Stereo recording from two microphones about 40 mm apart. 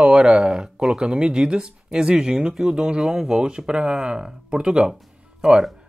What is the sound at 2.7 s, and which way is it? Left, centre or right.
Speech, right.